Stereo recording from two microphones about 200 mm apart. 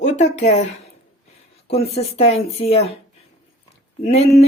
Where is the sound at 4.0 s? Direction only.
35° left (ahead or behind).